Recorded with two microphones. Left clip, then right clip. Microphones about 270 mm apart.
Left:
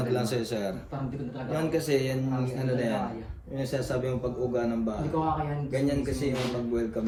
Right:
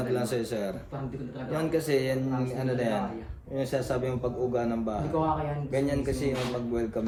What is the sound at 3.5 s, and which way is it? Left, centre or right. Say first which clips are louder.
A man's voice: right 1 dB; right.